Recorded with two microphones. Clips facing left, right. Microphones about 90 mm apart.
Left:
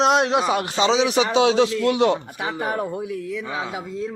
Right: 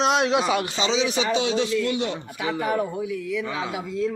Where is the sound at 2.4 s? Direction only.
40° left (ahead or behind).